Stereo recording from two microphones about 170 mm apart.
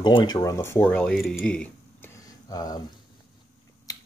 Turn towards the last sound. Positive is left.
turn(degrees=20)  # may be behind; listen again after turning